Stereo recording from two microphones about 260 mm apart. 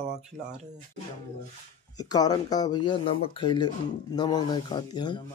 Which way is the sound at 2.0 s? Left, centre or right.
Centre.